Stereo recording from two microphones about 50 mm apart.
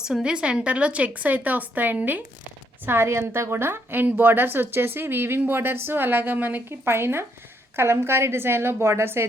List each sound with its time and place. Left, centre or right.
0.0 s a woman's voice: centre; by 2.2 s right
2.8 s a woman's voice: right
6.7 s a woman's voice: right